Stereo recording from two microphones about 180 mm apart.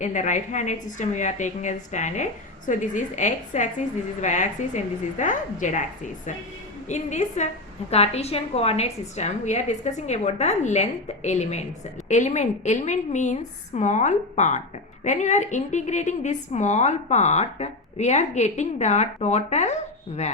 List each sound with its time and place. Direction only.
0.0 s a woman's voice: 40° left (ahead or behind)
6.8 s a woman's voice: 40° left (ahead or behind)